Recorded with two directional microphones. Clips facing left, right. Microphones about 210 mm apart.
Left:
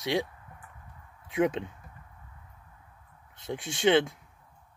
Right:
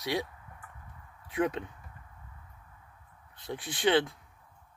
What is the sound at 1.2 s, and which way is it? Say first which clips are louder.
Speech: left 3 dB; 25° left (ahead or behind).